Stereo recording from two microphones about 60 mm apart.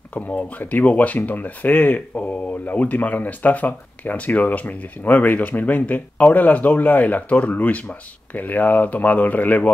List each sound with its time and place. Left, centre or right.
0.1 s speech: left